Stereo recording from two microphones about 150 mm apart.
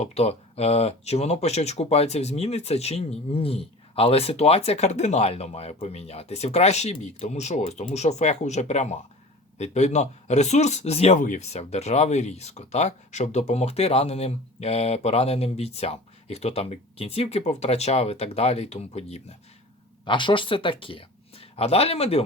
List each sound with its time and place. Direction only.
0.0 s speech: 45° left (ahead or behind)
20.1 s speech: 35° left (ahead or behind)